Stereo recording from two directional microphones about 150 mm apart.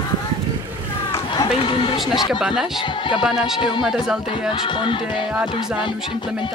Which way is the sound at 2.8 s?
30° left (ahead or behind).